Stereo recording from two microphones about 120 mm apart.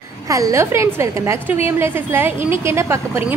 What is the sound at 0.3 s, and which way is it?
A woman's voice, 25° right (ahead or behind).